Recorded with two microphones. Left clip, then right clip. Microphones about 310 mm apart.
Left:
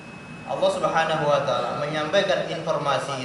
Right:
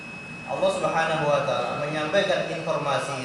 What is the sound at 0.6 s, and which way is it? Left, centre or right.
A man's voice, centre.